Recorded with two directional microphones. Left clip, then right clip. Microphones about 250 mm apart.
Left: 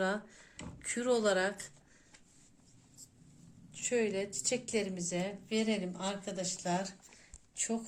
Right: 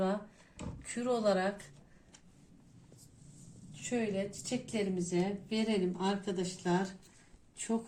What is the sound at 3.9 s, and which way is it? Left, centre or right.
A woman's voice, left.